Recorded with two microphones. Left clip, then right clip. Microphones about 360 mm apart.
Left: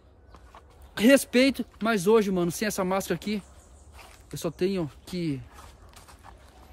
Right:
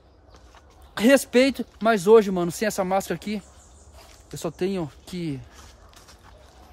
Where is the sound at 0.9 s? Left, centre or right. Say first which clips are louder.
Right 3 dB; centre.